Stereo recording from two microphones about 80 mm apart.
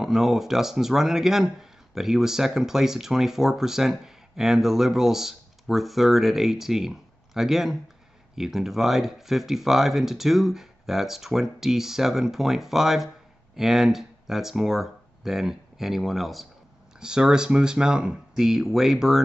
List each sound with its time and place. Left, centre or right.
0.0 s speech: centre